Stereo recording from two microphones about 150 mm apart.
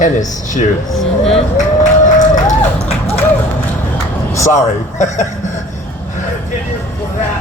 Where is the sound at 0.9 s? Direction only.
5° left (ahead or behind).